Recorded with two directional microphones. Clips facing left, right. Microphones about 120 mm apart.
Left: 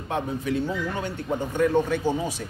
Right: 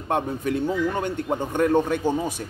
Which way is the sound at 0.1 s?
50° right (ahead or behind).